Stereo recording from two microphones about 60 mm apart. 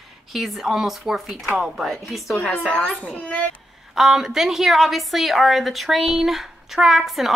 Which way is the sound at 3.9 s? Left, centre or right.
Centre.